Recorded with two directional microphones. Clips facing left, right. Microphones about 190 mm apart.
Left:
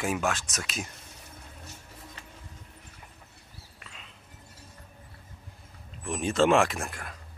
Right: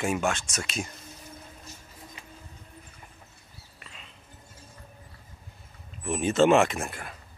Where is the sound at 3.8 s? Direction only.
Centre (ahead or behind).